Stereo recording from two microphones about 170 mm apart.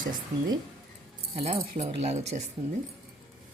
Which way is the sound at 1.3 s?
35° right (ahead or behind).